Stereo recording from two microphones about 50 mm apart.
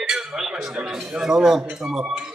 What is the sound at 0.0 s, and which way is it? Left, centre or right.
Dishes, centre.